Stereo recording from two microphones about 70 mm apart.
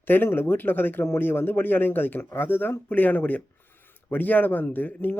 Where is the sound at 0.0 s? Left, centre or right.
Left.